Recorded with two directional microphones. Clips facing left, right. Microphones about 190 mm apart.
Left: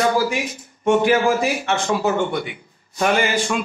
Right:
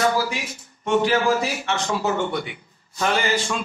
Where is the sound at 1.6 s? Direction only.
55° left (ahead or behind).